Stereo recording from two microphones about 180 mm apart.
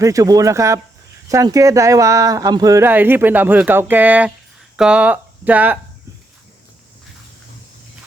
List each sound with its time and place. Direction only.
0.0 s speech: 20° right (ahead or behind)